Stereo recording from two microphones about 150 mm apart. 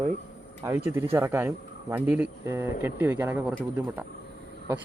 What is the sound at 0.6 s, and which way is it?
Speech, 15° right (ahead or behind).